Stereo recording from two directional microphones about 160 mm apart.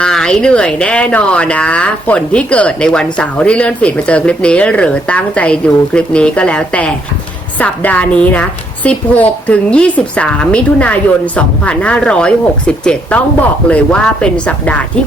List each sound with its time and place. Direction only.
0.0 s speech: 5° left (ahead or behind)